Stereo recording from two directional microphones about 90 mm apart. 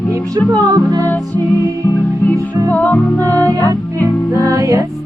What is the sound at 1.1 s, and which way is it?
Music, 20° left (ahead or behind).